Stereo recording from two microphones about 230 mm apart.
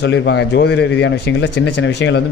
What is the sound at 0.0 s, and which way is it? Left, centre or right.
Speech, left.